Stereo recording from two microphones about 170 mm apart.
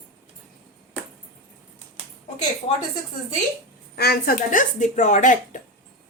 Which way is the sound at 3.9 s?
65° left (ahead or behind).